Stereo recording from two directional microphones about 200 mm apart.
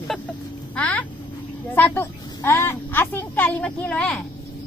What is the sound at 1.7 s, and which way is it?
A woman's voice, 10° left (ahead or behind).